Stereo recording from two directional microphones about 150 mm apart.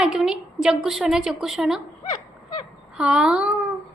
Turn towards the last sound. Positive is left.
turn(degrees=-5)  # may be behind; listen again after turning